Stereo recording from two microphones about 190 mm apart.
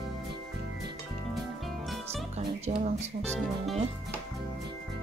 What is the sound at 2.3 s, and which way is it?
Music, 35° right (ahead or behind).